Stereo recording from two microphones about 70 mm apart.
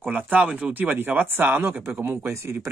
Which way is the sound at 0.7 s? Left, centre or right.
Right.